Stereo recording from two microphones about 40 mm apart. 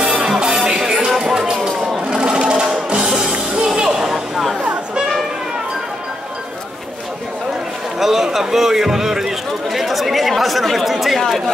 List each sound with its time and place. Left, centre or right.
0.7 s music: centre
2.0 s sewing machine: right
3.0 s music: centre
3.6 s a sound: centre
8.0 s a sound: centre
9.7 s chatter: centre